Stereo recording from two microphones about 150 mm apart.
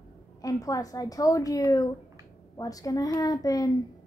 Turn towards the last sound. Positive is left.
turn(degrees=25)  # may be behind; listen again after turning